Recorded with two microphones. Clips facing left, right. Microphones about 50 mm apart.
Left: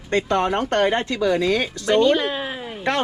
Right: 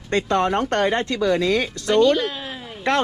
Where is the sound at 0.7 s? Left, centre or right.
Left.